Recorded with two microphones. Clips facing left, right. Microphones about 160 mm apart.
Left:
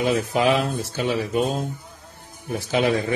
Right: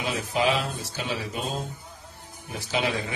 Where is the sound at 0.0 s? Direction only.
50° left (ahead or behind).